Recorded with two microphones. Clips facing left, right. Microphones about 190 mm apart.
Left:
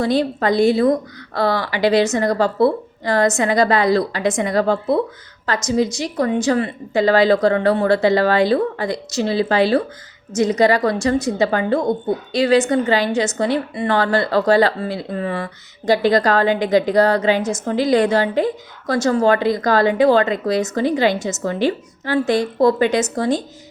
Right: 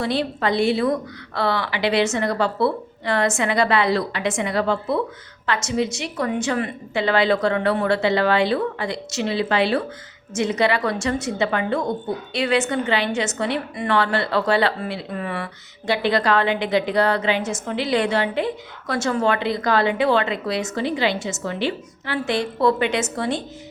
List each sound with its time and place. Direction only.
0.0 s a woman's voice: 40° left (ahead or behind)